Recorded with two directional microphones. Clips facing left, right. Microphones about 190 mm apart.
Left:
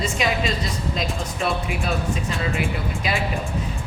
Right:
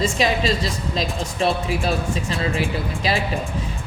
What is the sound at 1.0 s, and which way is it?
Speech, 30° right (ahead or behind).